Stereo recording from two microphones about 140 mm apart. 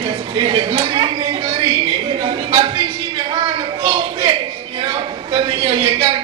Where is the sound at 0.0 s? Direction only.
40° right (ahead or behind).